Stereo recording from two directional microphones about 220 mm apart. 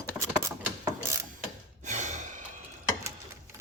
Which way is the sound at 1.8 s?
35° right (ahead or behind).